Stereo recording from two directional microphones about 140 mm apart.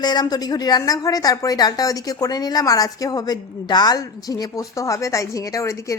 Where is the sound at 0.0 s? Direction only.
30° left (ahead or behind).